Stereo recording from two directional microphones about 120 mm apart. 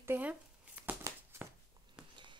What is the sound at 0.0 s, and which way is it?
Shuffling cards, 15° right (ahead or behind).